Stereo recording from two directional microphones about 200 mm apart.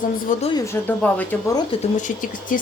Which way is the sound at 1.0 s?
10° left (ahead or behind).